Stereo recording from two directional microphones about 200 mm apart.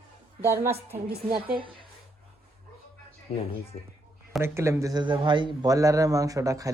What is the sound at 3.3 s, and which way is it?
Speech, 30° left (ahead or behind).